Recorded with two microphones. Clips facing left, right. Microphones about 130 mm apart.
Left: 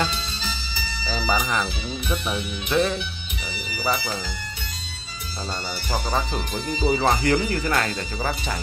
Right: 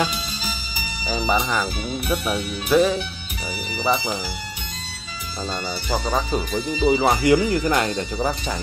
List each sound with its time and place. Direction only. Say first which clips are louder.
0.0 s music: right 2 dB; 10° right (ahead or behind)
2.0 s speech: right 3 dB; 5° right (ahead or behind)
3.7 s speech: right 3 dB; 20° right (ahead or behind)
6.0 s speech: right 3 dB; 10° right (ahead or behind)